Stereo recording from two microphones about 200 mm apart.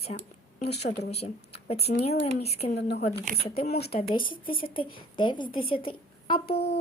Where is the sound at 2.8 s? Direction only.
55° left (ahead or behind).